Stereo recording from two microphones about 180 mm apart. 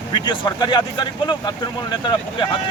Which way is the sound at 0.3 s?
25° left (ahead or behind).